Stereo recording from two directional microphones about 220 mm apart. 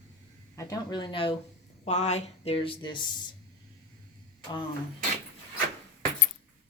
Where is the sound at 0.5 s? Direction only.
15° left (ahead or behind).